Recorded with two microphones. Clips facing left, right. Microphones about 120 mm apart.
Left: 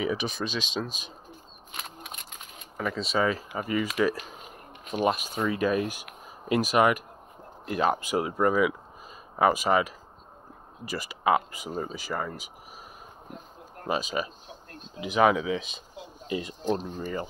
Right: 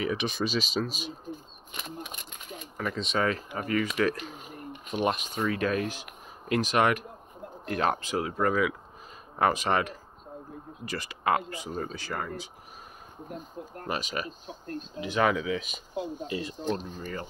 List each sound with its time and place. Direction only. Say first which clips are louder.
0.1 s speech: right 1 dB; centre (ahead or behind)
2.8 s speech: left 2 dB; centre (ahead or behind)
13.8 s speech: left 4 dB; 15° left (ahead or behind)
16.0 s speech: right 11 dB; 55° right (ahead or behind)
16.3 s speech: left 8 dB; 20° left (ahead or behind)